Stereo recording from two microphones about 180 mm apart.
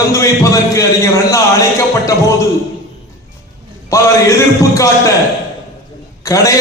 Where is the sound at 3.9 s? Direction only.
15° left (ahead or behind).